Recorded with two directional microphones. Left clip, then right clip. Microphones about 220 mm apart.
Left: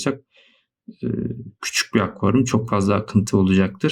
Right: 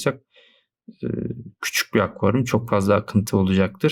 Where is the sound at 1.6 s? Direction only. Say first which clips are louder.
Even; 25° right (ahead or behind).